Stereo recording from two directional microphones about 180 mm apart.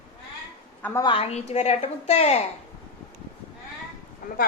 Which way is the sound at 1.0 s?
30° left (ahead or behind).